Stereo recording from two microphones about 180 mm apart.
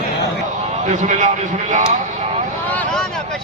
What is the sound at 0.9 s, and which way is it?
Speech, 40° right (ahead or behind).